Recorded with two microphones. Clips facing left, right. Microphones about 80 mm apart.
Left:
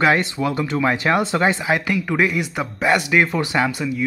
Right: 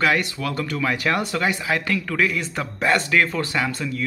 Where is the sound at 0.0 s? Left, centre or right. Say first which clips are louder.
Left 4 dB; left.